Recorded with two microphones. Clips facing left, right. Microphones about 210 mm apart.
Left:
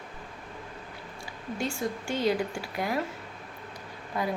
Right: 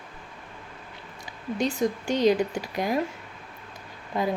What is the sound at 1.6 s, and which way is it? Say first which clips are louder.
Speech: right 6 dB; 20° right (ahead or behind).